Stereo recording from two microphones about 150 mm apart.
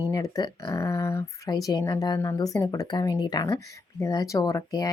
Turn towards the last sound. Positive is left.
turn(degrees=25)  # may be behind; listen again after turning